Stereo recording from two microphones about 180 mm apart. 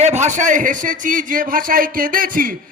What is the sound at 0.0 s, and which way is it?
A man's voice, 40° right (ahead or behind).